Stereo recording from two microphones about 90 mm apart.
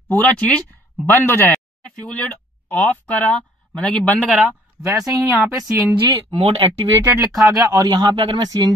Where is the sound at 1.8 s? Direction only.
15° left (ahead or behind).